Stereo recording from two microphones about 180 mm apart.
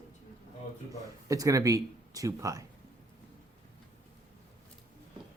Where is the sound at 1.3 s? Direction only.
20° right (ahead or behind).